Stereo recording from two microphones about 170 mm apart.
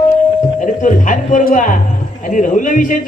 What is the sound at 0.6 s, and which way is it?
A man's voice, 45° left (ahead or behind).